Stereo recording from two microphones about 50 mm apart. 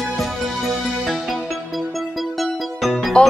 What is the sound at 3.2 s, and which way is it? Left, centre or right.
Speech, left.